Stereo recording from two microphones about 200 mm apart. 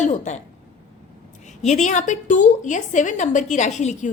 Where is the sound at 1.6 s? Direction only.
35° left (ahead or behind).